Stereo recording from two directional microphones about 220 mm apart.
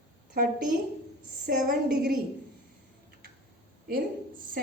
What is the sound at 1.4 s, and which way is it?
Speech, 40° right (ahead or behind).